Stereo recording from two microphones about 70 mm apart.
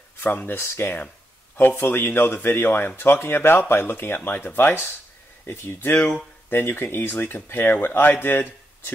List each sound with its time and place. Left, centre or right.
0.2 s speech: left